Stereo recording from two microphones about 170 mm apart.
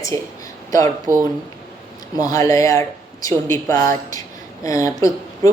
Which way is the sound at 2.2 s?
20° left (ahead or behind).